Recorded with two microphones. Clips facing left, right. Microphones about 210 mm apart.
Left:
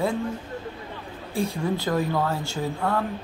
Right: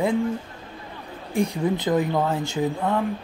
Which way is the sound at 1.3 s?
20° right (ahead or behind).